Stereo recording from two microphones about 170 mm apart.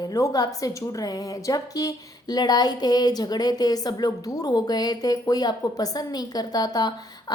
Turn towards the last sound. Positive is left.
turn(degrees=25)  # may be behind; listen again after turning